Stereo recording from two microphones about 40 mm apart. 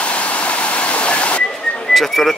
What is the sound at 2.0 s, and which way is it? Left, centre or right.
Speech, centre.